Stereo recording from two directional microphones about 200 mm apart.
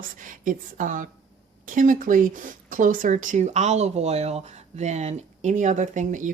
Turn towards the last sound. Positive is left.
turn(degrees=-40)  # may be behind; listen again after turning